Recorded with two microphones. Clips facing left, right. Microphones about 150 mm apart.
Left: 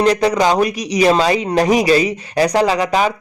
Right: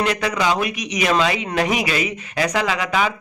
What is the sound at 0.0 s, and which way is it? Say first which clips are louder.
Speech: left 7 dB; 35° left (ahead or behind).